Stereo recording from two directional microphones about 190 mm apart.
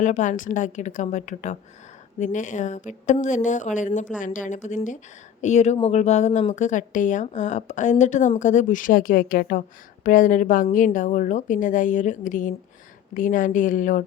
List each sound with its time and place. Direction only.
0.0 s a woman's voice: 40° left (ahead or behind)